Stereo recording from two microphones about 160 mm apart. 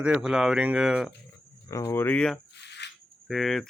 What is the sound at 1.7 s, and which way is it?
Speech, 20° left (ahead or behind).